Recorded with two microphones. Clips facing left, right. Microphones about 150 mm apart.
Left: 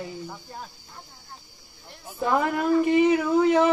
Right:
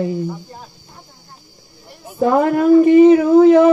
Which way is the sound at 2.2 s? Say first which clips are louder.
Right 10 dB; 50° right (ahead or behind).